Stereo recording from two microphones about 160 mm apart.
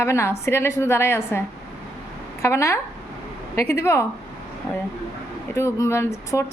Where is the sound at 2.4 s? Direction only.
20° left (ahead or behind).